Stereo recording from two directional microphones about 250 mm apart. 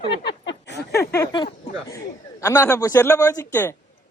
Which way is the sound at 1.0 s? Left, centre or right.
Centre.